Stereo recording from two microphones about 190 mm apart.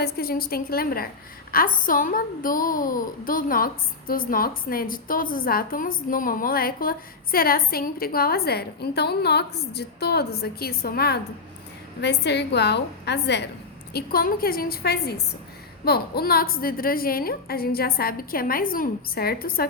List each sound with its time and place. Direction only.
0.0 s a woman's voice: 50° left (ahead or behind)
13.9 s a woman's voice: 50° left (ahead or behind)